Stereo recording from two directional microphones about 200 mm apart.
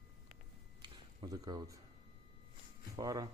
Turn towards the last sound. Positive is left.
turn(degrees=-20)  # may be behind; listen again after turning